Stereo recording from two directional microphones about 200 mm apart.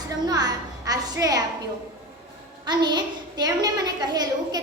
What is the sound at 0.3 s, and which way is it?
A woman's voice, 20° right (ahead or behind).